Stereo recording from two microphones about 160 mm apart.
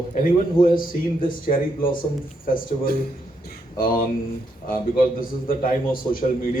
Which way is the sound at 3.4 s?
65° left (ahead or behind).